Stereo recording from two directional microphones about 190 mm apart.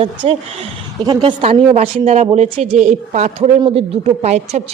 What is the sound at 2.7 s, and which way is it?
A woman's voice, 40° right (ahead or behind).